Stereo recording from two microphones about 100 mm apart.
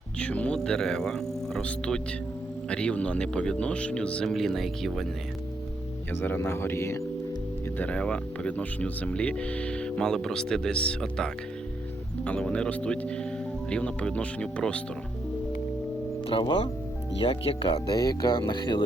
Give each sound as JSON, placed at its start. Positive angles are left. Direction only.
{"t": 0.2, "sound": "speech", "side_deg": 10}
{"t": 6.1, "sound": "speech", "side_deg": 20}
{"t": 7.8, "sound": "speech", "side_deg": 15}
{"t": 16.2, "sound": "speech", "side_deg": 55}
{"t": 17.2, "sound": "speech", "side_deg": 65}
{"t": 17.8, "sound": "speech", "side_deg": 40}
{"t": 18.4, "sound": "speech", "side_deg": 50}